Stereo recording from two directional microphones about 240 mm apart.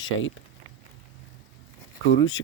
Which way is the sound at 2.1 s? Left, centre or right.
Left.